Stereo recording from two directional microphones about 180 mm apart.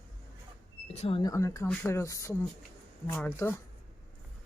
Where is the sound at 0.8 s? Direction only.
35° left (ahead or behind).